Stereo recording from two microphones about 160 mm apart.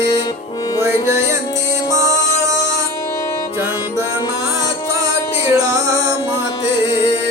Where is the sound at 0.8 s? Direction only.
15° right (ahead or behind).